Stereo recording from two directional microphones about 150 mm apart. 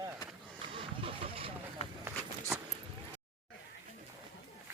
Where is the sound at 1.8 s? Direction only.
45° left (ahead or behind).